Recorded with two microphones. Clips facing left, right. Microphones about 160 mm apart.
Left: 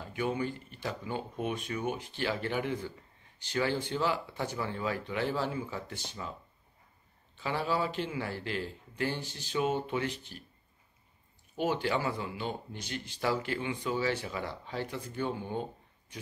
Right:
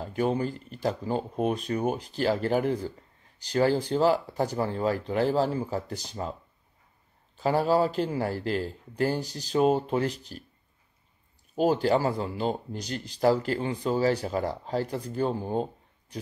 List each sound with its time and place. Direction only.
0.0 s speech: 35° right (ahead or behind)
7.3 s speech: 40° right (ahead or behind)
11.5 s speech: 40° right (ahead or behind)